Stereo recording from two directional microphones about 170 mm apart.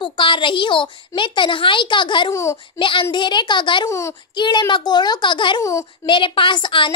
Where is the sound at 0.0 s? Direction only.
30° left (ahead or behind).